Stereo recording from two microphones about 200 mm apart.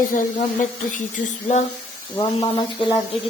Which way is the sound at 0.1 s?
40° left (ahead or behind).